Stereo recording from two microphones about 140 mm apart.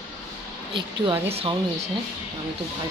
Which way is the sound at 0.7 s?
40° right (ahead or behind).